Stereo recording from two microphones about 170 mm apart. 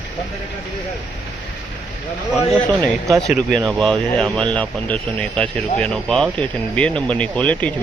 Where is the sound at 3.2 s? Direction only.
5° left (ahead or behind).